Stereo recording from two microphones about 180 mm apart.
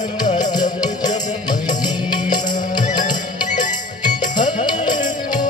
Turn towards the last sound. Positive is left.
turn(degrees=45)  # may be behind; listen again after turning